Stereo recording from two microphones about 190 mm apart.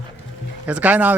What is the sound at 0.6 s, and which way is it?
Speech, 10° right (ahead or behind).